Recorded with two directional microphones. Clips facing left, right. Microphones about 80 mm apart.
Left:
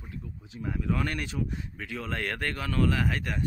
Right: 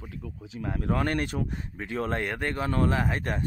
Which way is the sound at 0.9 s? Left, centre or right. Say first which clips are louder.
Right 4 dB; right.